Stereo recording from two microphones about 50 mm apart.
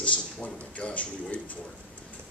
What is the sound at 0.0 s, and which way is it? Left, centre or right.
Speech, left.